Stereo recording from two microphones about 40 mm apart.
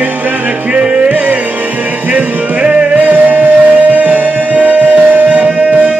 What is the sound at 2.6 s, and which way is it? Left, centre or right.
Music, right.